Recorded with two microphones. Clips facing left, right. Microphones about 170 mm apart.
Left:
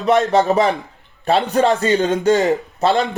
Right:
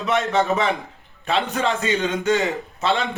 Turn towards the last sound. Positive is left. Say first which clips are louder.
# left 6 dB
turn(degrees=40)  # may be behind; listen again after turning